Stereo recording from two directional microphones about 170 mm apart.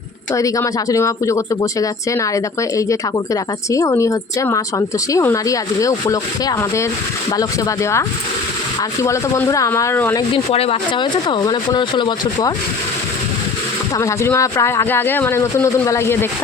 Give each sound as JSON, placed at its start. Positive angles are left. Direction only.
{"t": 0.3, "sound": "a woman's voice", "side_deg": 20}
{"t": 10.3, "sound": "a woman's voice", "side_deg": 35}
{"t": 13.9, "sound": "speech", "side_deg": 15}